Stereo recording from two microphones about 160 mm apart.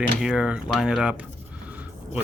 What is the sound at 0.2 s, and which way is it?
Speech, 5° right (ahead or behind).